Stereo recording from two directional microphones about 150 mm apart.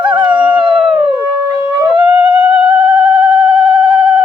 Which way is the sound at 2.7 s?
35° right (ahead or behind).